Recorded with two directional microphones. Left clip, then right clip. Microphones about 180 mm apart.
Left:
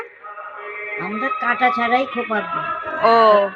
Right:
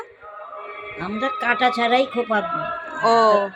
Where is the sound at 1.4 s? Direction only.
30° right (ahead or behind).